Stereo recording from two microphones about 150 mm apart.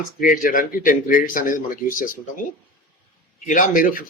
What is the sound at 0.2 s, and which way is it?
Speech, 70° left (ahead or behind).